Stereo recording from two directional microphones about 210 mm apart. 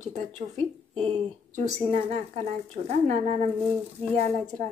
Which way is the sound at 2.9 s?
30° right (ahead or behind).